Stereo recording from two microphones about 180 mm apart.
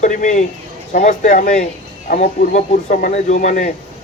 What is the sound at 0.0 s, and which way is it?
A man's voice, 45° left (ahead or behind).